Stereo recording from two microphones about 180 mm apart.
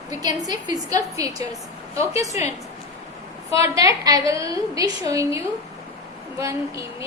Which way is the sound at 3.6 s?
20° right (ahead or behind).